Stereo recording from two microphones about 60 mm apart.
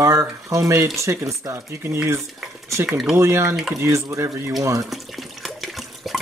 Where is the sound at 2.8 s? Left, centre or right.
Centre.